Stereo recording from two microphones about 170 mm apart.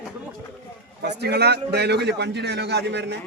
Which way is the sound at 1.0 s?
75° right (ahead or behind).